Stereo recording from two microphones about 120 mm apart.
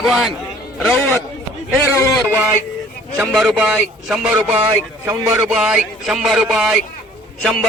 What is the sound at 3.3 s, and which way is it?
A man's voice, centre (ahead or behind).